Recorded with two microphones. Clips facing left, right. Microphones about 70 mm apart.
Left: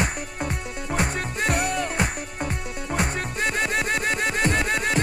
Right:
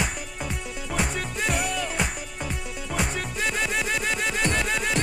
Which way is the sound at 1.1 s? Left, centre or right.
Left.